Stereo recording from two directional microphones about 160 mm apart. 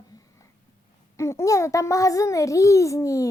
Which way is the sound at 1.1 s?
15° left (ahead or behind).